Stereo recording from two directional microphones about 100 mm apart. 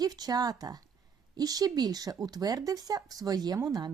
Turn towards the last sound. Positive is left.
turn(degrees=-40)  # may be behind; listen again after turning